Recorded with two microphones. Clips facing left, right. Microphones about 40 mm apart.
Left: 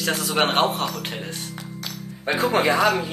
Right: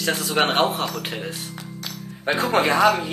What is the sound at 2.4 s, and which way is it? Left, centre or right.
Speech, right.